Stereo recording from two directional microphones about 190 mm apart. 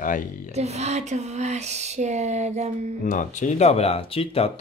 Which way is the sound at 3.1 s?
40° left (ahead or behind).